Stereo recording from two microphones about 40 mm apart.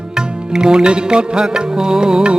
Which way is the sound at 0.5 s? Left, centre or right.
Centre.